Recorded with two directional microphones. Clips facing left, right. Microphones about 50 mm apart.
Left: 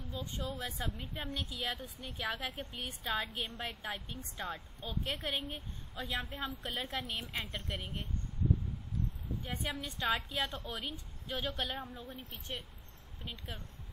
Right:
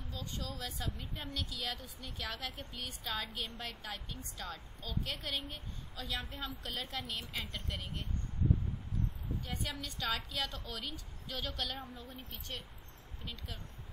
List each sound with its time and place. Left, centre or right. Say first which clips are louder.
0.0 s a woman's voice: left 3 dB; left
7.0 s a woman's voice: left 2 dB; centre
9.4 s a woman's voice: left 4 dB; left